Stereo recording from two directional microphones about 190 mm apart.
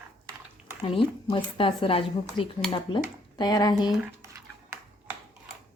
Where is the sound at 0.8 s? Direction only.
25° left (ahead or behind).